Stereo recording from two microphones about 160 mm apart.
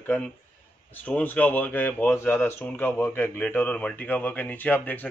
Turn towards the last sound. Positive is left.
turn(degrees=10)  # may be behind; listen again after turning